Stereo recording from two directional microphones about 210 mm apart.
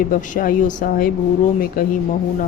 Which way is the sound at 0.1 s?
40° left (ahead or behind).